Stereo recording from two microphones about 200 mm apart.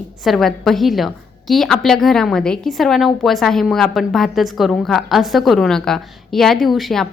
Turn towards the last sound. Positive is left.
turn(degrees=0)  # may be behind; listen again after turning